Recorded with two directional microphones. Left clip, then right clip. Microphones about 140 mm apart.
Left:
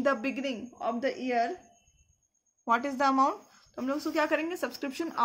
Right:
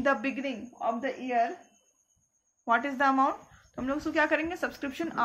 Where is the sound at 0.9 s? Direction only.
60° left (ahead or behind).